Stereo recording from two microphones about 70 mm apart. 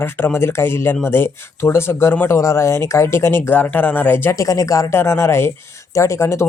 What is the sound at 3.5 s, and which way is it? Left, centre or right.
Speech, left.